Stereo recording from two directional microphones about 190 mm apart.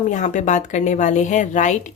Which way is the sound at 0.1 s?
40° left (ahead or behind).